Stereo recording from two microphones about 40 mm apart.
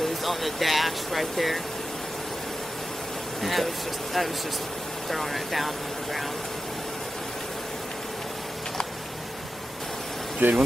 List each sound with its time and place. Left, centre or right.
0.0 s speech: centre
3.4 s speech: centre
10.4 s speech: right